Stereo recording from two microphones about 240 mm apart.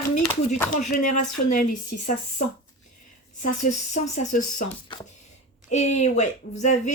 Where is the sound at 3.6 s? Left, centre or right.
Left.